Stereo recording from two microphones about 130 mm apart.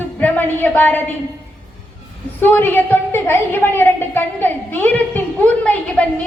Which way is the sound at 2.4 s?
15° left (ahead or behind).